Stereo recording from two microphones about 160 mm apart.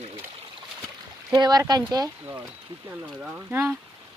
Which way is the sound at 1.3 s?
25° right (ahead or behind).